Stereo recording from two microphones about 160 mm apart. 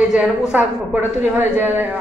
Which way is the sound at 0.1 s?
5° right (ahead or behind).